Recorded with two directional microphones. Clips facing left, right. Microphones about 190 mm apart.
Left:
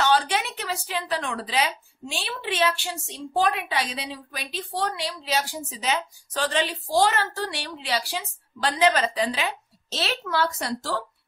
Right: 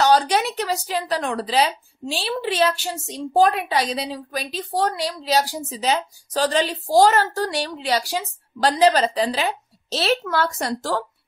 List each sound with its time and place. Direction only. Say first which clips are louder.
0.0 s speech: right 5 dB; 40° right (ahead or behind)